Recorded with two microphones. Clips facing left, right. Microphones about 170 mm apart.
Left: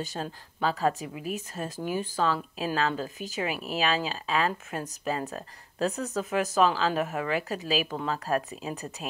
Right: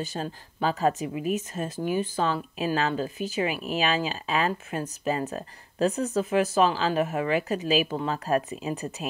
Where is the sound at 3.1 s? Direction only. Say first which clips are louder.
Right 5 dB; 40° left (ahead or behind).